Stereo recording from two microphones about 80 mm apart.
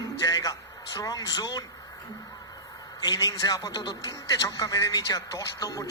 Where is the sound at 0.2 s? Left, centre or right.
Left.